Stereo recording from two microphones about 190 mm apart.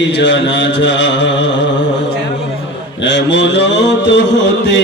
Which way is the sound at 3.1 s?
70° left (ahead or behind).